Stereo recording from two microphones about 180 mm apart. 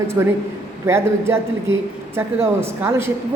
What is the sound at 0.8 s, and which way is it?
A man's voice, 15° right (ahead or behind).